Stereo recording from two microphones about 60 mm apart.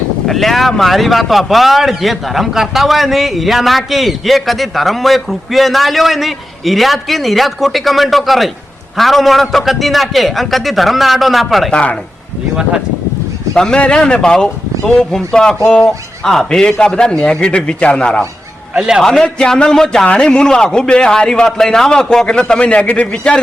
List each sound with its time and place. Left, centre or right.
0.3 s speech: centre
11.7 s speech: centre
13.5 s speech: centre
18.8 s a man's voice: centre
19.0 s speech: centre